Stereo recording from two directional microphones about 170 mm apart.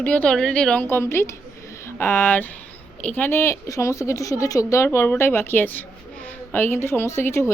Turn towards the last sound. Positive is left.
turn(degrees=15)  # may be behind; listen again after turning